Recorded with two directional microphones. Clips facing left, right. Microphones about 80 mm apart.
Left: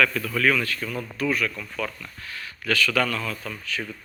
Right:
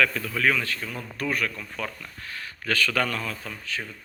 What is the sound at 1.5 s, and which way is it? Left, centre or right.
A man's voice, right.